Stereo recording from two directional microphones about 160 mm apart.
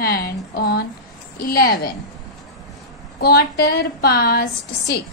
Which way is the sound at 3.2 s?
75° left (ahead or behind).